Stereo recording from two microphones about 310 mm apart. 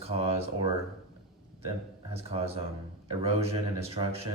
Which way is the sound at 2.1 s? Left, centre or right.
Centre.